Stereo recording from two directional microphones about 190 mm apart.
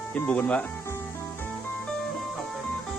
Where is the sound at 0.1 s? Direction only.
5° left (ahead or behind).